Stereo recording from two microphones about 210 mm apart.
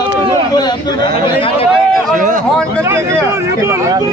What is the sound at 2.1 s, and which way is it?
Speech, 35° right (ahead or behind).